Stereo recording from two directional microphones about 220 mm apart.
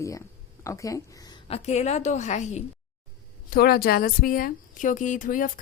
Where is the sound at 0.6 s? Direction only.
15° left (ahead or behind); by 2.6 s 30° left (ahead or behind).